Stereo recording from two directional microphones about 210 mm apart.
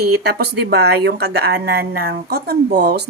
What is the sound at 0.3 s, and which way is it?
A woman's voice, 50° right (ahead or behind).